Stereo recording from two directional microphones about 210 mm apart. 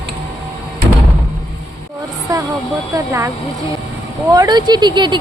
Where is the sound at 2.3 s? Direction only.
15° right (ahead or behind).